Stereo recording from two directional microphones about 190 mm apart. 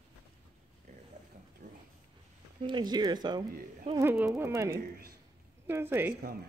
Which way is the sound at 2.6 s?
25° right (ahead or behind).